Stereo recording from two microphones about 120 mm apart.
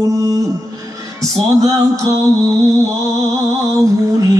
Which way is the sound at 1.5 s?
30° right (ahead or behind).